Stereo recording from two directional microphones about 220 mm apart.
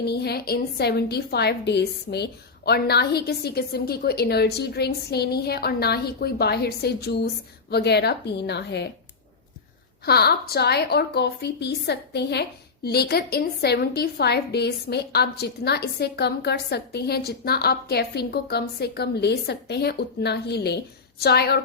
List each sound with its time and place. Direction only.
0.0 s a woman's voice: 45° left (ahead or behind)
10.1 s a woman's voice: 45° left (ahead or behind)